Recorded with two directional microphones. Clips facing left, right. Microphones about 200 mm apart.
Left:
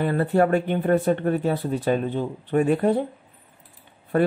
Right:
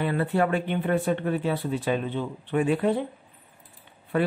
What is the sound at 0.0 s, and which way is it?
Speech, 40° left (ahead or behind).